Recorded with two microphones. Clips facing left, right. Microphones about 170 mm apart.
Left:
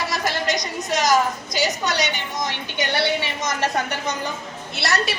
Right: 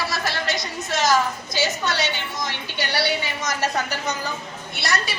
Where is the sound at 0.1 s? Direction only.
15° left (ahead or behind).